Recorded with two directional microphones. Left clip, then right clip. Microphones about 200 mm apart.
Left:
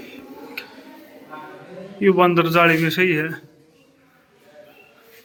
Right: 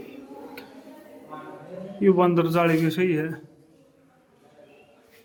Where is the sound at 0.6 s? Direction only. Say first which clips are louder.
Left 9 dB; 10° right (ahead or behind).